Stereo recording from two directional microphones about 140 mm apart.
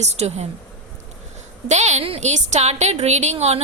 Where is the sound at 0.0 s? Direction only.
50° right (ahead or behind).